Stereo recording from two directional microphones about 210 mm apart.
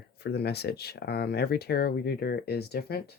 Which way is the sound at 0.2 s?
50° left (ahead or behind).